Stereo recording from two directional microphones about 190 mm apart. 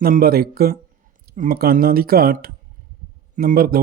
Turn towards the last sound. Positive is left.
turn(degrees=-50)  # may be behind; listen again after turning